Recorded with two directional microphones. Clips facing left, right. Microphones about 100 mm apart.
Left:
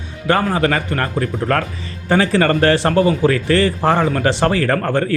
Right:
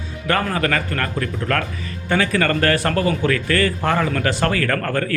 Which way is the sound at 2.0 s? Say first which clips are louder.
Left 4 dB; 30° left (ahead or behind).